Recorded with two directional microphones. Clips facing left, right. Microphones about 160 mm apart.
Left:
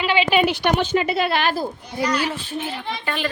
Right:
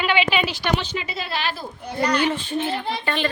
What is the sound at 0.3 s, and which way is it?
Speech, 55° left (ahead or behind).